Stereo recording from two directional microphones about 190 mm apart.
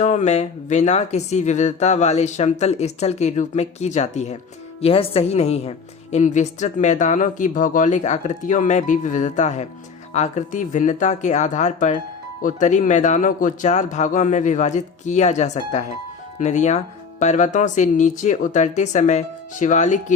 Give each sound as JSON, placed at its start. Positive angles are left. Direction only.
{"t": 0.0, "sound": "a woman's voice", "side_deg": 35}